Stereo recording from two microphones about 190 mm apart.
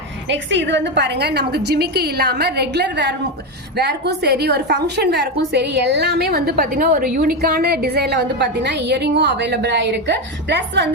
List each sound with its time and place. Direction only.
0.3 s a woman's voice: 70° right (ahead or behind)